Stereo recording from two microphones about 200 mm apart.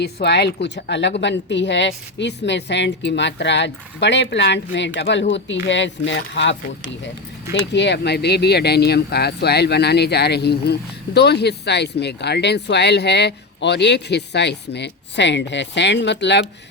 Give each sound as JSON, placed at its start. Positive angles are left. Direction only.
{"t": 0.0, "sound": "speech", "side_deg": 55}